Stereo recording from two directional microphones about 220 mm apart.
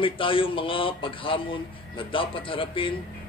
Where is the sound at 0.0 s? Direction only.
25° left (ahead or behind).